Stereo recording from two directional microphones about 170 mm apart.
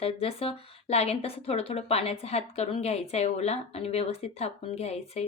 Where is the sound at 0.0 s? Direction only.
35° left (ahead or behind).